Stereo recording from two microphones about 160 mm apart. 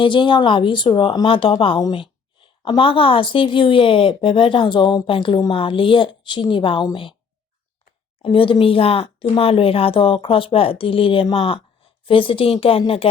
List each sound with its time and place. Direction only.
0.0 s speech: 30° left (ahead or behind)
8.2 s speech: 35° left (ahead or behind)